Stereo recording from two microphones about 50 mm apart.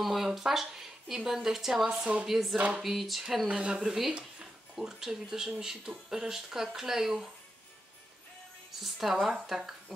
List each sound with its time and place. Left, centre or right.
0.0 s speech: centre
1.9 s speech: right
2.2 s speech: centre
2.5 s speech: right
2.8 s speech: centre
8.8 s speech: centre